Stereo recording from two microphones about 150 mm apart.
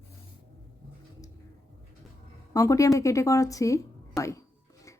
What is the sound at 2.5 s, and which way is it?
A woman's voice, 20° left (ahead or behind).